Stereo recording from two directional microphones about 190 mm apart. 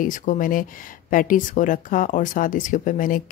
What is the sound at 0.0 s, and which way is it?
Speech, 45° left (ahead or behind).